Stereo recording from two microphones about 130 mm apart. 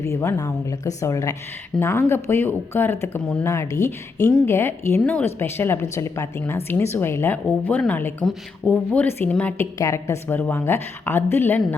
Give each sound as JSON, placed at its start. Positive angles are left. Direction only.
{"t": 0.0, "sound": "a woman's voice", "side_deg": 20}
{"t": 9.7, "sound": "a woman's voice", "side_deg": 25}